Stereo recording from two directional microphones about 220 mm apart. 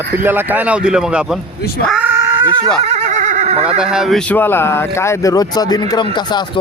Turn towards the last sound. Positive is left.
turn(degrees=20)  # may be behind; listen again after turning